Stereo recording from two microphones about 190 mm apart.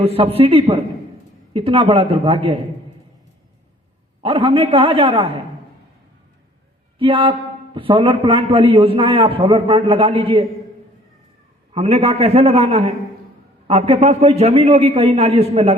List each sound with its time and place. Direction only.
0.0 s a man's voice: 30° right (ahead or behind)
4.2 s a man's voice: 30° right (ahead or behind)
7.0 s a man's voice: 25° right (ahead or behind)
11.7 s a man's voice: 30° right (ahead or behind)